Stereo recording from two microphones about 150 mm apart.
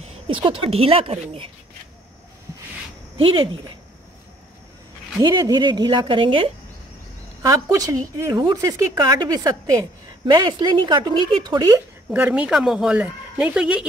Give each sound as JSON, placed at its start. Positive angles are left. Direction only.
{"t": 0.0, "sound": "speech", "side_deg": -35}
{"t": 3.2, "sound": "speech", "side_deg": -35}
{"t": 5.2, "sound": "speech", "side_deg": -25}
{"t": 7.4, "sound": "a woman's voice", "side_deg": -25}
{"t": 12.1, "sound": "speech", "side_deg": -10}